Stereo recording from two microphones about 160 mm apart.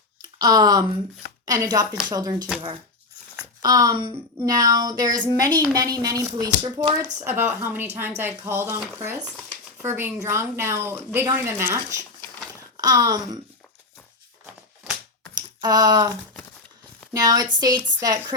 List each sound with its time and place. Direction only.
0.2 s a sound: 25° right (ahead or behind)
1.5 s speech: 25° right (ahead or behind)
3.6 s speech: 20° right (ahead or behind)
15.4 s speech: 25° right (ahead or behind)
17.2 s speech: 25° right (ahead or behind)